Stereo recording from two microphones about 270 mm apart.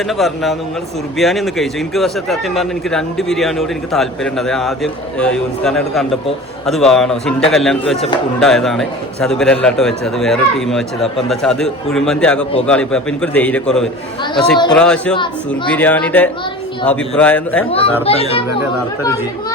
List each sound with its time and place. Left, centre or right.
0.1 s a man's voice: centre
17.7 s speech: left